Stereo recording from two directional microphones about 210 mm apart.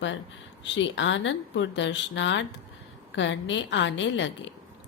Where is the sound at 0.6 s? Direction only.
60° left (ahead or behind).